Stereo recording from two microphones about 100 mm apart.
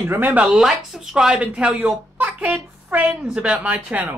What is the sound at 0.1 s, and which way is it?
Speech, 20° right (ahead or behind).